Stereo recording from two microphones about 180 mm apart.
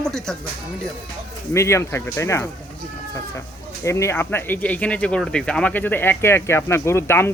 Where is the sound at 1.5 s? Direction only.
15° left (ahead or behind).